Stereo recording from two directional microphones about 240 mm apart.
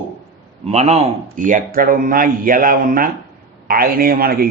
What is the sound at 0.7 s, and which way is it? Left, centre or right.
A man's voice, right.